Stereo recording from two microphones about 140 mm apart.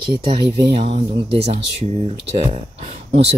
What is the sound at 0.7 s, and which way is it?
Speech, 45° right (ahead or behind).